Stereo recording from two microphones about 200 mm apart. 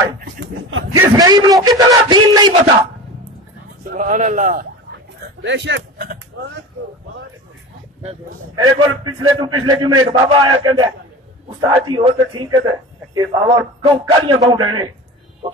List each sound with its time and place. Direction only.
0.7 s a man's voice: 80° right
1.1 s a sound: 20° right (ahead or behind)
1.9 s a man's voice: 20° right (ahead or behind)
3.9 s speech: 40° right (ahead or behind)
5.4 s speech: 65° right (ahead or behind)
8.5 s a man's voice: 20° right (ahead or behind)